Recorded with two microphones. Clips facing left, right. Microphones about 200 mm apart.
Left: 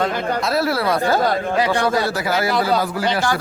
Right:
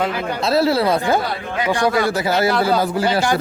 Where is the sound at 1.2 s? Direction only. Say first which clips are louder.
Left 6 dB; 45° left (ahead or behind).